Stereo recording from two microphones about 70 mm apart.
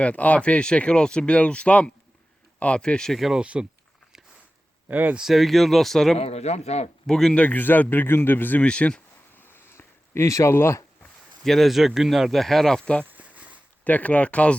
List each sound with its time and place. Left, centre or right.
0.0 s speech: left
3.2 s speech: centre
3.4 s speech: centre
4.9 s speech: right
5.1 s speech: centre
7.3 s a man's voice: left
8.6 s speech: centre
9.4 s a sound: left
10.5 s speech: left
11.4 s speech: centre
13.1 s a sound: right
13.8 s a man's voice: left